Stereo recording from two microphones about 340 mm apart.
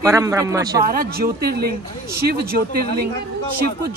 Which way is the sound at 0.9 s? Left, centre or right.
Right.